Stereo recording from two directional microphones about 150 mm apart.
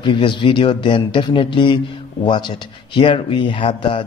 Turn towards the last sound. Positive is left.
turn(degrees=35)  # may be behind; listen again after turning